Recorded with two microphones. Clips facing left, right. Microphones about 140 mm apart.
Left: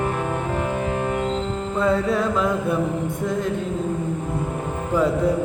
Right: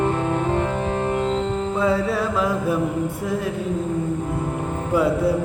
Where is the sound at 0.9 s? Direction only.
20° right (ahead or behind).